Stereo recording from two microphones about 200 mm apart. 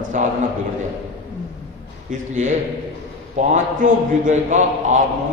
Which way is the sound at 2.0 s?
35° right (ahead or behind).